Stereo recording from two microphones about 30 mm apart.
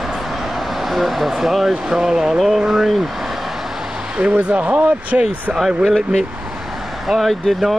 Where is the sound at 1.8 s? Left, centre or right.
Centre.